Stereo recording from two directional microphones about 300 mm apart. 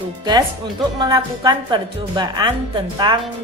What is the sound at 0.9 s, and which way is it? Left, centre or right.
Speech, centre.